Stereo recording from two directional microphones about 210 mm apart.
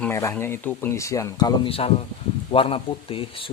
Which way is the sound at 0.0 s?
15° left (ahead or behind).